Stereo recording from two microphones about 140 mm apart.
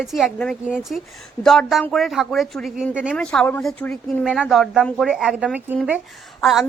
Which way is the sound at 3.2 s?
10° left (ahead or behind).